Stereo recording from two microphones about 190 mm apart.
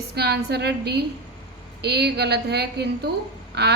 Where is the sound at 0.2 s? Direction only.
60° right (ahead or behind).